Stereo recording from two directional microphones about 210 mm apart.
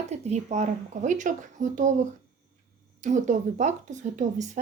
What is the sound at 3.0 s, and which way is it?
A woman's voice, 35° right (ahead or behind).